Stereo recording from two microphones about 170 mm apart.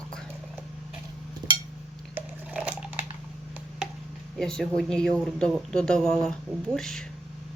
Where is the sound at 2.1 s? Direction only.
5° right (ahead or behind).